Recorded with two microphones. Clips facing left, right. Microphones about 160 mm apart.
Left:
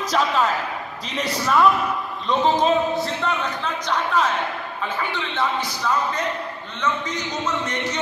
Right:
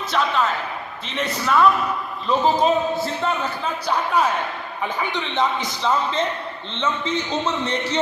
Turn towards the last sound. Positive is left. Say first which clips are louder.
# right 2 dB
turn(degrees=-30)  # may be behind; listen again after turning